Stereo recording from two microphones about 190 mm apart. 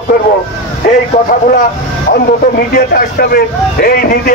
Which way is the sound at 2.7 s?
50° left (ahead or behind).